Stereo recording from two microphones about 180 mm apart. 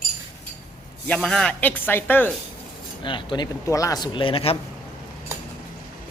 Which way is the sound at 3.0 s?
25° left (ahead or behind).